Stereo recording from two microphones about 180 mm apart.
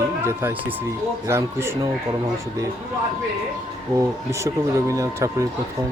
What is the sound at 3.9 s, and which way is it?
Speech, 15° right (ahead or behind).